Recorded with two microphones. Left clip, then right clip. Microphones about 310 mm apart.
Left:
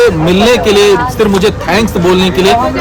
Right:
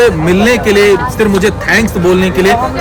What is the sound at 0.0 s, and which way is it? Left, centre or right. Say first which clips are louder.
A man's voice: left 1 dB; centre.